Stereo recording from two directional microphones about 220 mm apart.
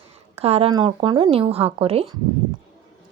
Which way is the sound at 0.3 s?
25° right (ahead or behind).